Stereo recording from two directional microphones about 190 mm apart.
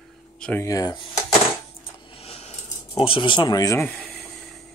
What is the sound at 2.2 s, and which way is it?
Coin, 30° left (ahead or behind).